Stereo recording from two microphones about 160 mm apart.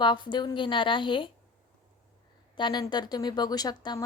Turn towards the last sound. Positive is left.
turn(degrees=25)  # may be behind; listen again after turning